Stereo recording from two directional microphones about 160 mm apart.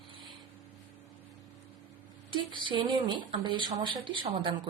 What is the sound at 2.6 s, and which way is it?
Speech, 30° right (ahead or behind).